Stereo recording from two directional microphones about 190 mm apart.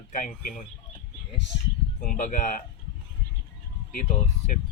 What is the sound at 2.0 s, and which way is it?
Speech, 45° left (ahead or behind).